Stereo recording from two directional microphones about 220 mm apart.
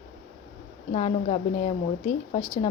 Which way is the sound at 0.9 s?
30° left (ahead or behind).